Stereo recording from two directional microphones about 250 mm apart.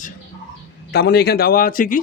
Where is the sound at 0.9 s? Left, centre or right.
Left.